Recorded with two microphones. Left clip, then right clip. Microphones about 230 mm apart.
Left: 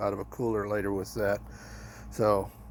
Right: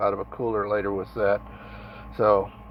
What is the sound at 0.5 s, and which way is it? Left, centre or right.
Speech, left.